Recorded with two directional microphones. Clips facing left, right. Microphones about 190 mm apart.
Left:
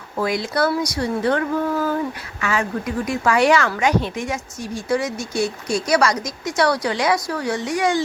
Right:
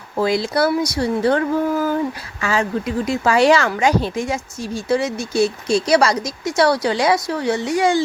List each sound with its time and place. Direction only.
0.2 s speech: 30° right (ahead or behind)